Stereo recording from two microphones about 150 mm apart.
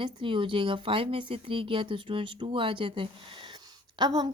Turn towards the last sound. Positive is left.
turn(degrees=-30)  # may be behind; listen again after turning